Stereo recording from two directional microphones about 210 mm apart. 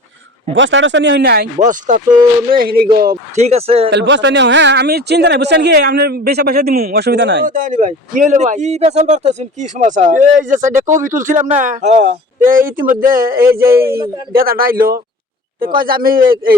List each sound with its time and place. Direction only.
0.5 s speech: 60° right (ahead or behind)
1.5 s a man's voice: 35° right (ahead or behind)
3.3 s speech: 30° right (ahead or behind)
3.8 s a man's voice: 55° right (ahead or behind)
7.4 s speech: 35° right (ahead or behind)
13.4 s speech: 10° right (ahead or behind)
13.8 s a man's voice: 45° right (ahead or behind)